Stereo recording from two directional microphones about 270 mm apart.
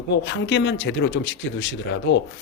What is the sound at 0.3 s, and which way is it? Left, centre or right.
Speech, left.